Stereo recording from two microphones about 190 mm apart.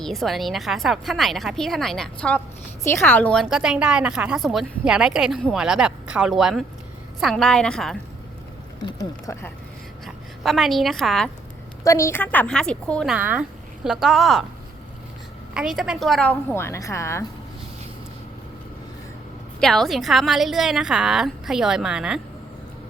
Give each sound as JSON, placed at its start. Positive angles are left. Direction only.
{"t": 0.0, "sound": "a woman's voice", "side_deg": 0}
{"t": 8.8, "sound": "a woman's voice", "side_deg": 15}
{"t": 10.4, "sound": "a woman's voice", "side_deg": 0}
{"t": 11.8, "sound": "a woman's voice", "side_deg": 15}
{"t": 13.1, "sound": "a woman's voice", "side_deg": -10}
{"t": 15.5, "sound": "a woman's voice", "side_deg": 0}
{"t": 19.5, "sound": "a woman's voice", "side_deg": 0}